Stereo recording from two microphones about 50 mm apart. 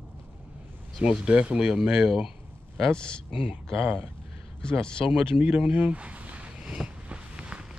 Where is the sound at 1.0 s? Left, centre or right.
Right.